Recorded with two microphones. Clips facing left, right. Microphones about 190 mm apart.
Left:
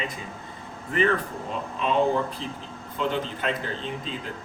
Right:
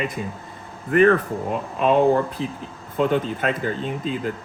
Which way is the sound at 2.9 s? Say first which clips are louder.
Right 7 dB; 50° right (ahead or behind).